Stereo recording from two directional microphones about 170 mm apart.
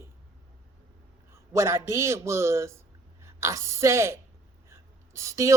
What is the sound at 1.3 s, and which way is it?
A man's voice, 15° right (ahead or behind).